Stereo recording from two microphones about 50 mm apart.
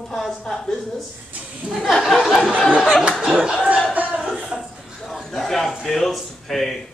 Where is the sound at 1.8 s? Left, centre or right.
Centre.